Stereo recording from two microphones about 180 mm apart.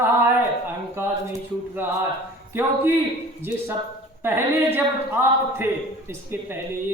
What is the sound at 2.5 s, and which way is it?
Speech, 10° right (ahead or behind).